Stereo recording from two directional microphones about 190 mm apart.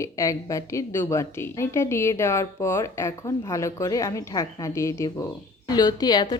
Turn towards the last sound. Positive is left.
turn(degrees=20)  # may be behind; listen again after turning